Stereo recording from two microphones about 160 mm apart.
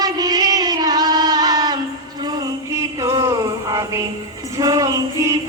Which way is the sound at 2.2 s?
25° right (ahead or behind).